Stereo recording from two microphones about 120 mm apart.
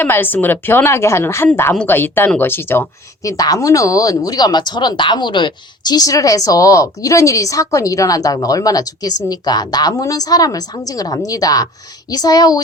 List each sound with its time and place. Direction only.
0.0 s a woman's voice: 15° left (ahead or behind)
3.2 s speech: 30° left (ahead or behind)